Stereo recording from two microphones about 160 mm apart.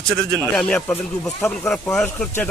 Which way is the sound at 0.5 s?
5° left (ahead or behind).